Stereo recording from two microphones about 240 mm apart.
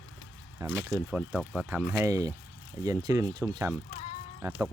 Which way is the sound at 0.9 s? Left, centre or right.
Centre.